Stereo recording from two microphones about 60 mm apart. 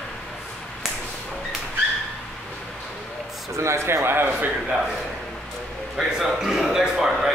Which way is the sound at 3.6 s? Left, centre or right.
Right.